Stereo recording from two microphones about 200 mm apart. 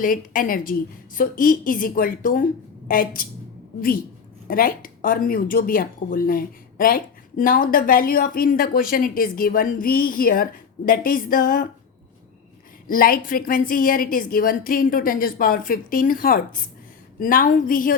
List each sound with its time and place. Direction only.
0.0 s speech: 40° left (ahead or behind)
12.9 s speech: 45° left (ahead or behind)